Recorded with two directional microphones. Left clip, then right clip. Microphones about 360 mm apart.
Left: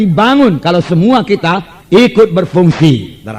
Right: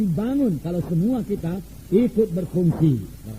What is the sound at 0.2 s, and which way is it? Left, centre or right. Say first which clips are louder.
Speech: left 18 dB; right.